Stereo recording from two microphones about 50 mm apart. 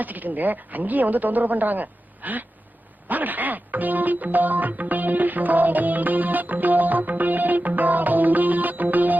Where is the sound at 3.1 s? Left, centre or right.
Right.